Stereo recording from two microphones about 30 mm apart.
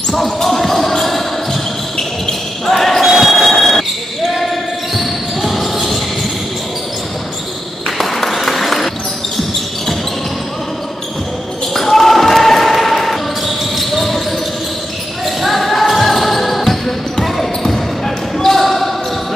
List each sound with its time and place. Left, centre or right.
0.1 s basketball bounce: centre
2.0 s a sound: centre
3.0 s train: centre
4.9 s basketball bounce: centre
8.0 s applause: centre
11.7 s basketball bounce: centre
15.2 s basketball bounce: centre